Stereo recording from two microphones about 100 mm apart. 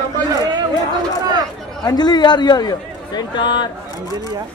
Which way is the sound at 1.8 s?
45° left (ahead or behind).